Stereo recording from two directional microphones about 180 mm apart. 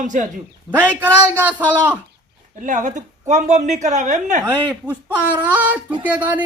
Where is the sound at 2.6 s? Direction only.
45° right (ahead or behind).